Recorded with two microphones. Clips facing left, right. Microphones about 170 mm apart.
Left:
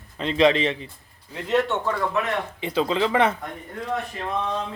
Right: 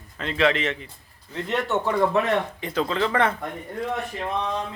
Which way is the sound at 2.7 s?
15° left (ahead or behind).